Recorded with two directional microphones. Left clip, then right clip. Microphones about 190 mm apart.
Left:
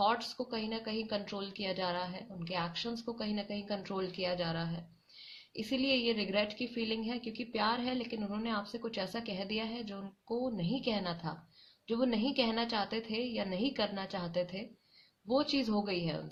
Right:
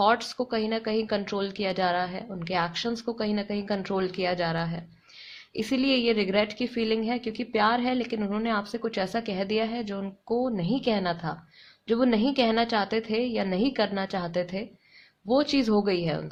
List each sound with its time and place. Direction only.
0.0 s a woman's voice: 40° right (ahead or behind)